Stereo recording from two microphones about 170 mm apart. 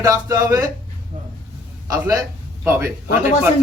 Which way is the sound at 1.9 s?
20° right (ahead or behind).